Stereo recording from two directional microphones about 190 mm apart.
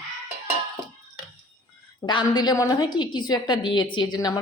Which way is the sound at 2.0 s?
25° left (ahead or behind).